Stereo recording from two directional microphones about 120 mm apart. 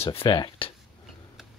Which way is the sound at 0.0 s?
50° left (ahead or behind).